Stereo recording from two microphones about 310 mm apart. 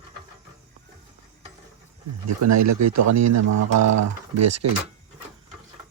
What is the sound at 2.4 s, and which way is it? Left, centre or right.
Speech, right.